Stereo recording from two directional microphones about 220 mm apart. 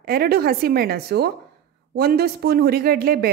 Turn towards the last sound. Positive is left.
turn(degrees=-45)  # may be behind; listen again after turning